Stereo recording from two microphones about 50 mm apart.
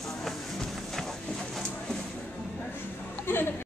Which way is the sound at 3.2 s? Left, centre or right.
Left.